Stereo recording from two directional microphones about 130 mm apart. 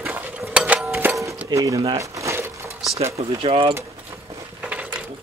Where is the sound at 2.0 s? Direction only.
25° right (ahead or behind).